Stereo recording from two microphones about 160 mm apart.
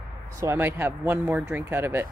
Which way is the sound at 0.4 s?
15° right (ahead or behind).